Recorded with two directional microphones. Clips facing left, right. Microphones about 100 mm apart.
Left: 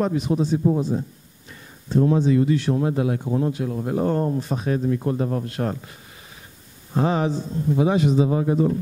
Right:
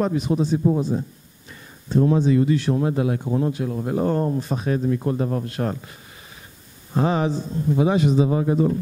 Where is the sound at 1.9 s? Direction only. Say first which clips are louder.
Even; 20° right (ahead or behind).